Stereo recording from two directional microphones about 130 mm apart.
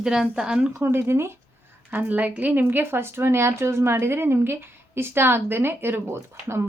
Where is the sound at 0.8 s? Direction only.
20° right (ahead or behind).